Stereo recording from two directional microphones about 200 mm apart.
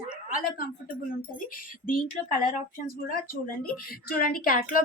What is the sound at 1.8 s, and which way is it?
Speech, 45° left (ahead or behind).